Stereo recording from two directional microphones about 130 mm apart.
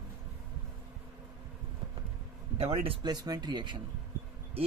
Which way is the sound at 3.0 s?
30° right (ahead or behind).